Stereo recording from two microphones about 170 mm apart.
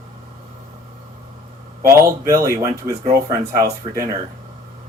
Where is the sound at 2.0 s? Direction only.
20° right (ahead or behind).